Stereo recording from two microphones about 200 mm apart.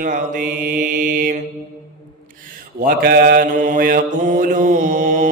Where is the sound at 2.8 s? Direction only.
45° right (ahead or behind).